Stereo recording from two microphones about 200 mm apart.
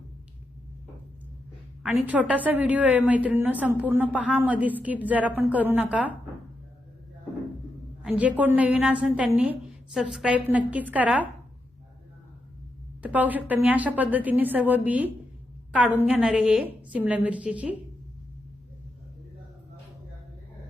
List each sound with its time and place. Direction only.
2.3 s a woman's voice: 10° right (ahead or behind)
8.0 s a woman's voice: 5° right (ahead or behind)
13.0 s a woman's voice: 10° right (ahead or behind)